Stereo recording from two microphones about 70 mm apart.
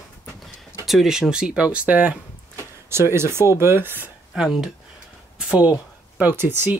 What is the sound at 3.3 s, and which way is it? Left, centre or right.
Speech, right.